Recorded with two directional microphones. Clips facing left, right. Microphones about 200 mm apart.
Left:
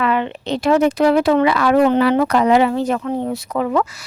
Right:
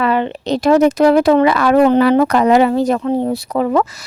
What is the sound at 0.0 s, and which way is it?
Speech, 35° right (ahead or behind).